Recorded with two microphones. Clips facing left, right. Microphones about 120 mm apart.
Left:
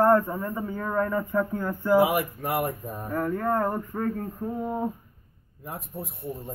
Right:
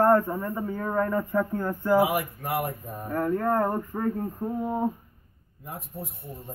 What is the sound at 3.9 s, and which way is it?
Speech, 20° right (ahead or behind).